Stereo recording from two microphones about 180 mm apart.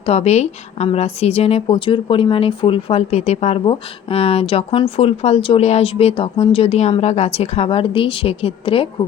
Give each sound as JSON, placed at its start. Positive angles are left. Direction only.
{"t": 0.0, "sound": "a woman's voice", "side_deg": 35}